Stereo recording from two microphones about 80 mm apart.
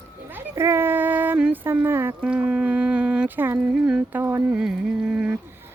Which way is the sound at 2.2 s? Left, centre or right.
Centre.